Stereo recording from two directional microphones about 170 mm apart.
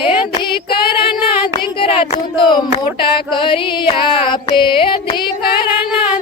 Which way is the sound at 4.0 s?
30° left (ahead or behind).